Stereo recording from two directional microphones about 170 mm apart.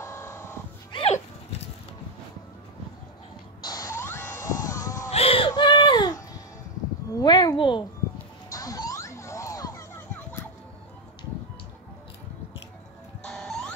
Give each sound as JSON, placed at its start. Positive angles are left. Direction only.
{"t": 0.0, "sound": "music", "side_deg": 15}
{"t": 0.9, "sound": "horse", "side_deg": 35}
{"t": 3.6, "sound": "music", "side_deg": 20}
{"t": 4.6, "sound": "a sound", "side_deg": 20}
{"t": 5.1, "sound": "a sound", "side_deg": 35}
{"t": 5.5, "sound": "baby cry", "side_deg": 25}
{"t": 7.2, "sound": "a sound", "side_deg": 25}
{"t": 8.5, "sound": "music", "side_deg": 20}
{"t": 13.3, "sound": "music", "side_deg": 5}